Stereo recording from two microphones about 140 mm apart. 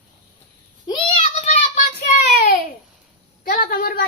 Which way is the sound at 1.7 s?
60° left (ahead or behind).